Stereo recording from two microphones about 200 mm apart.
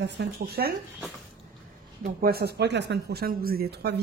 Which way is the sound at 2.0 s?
50° right (ahead or behind).